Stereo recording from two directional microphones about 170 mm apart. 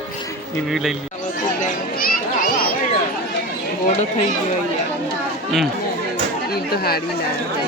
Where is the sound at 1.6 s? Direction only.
55° left (ahead or behind).